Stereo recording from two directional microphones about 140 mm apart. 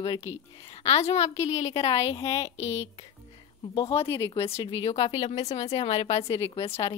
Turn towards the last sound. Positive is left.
turn(degrees=45)  # may be behind; listen again after turning